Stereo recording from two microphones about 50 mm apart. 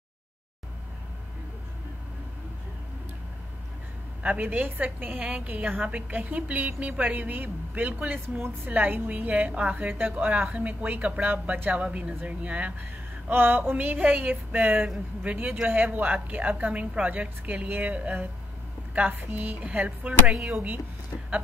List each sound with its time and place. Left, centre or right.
4.4 s a woman's voice: right
13.3 s a woman's voice: right
19.1 s a woman's voice: right
20.2 s speech: centre